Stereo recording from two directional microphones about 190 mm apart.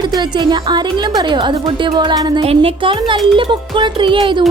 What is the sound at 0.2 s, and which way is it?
Music, 25° right (ahead or behind).